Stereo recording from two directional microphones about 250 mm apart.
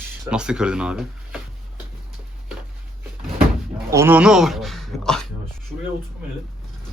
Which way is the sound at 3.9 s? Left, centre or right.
Centre.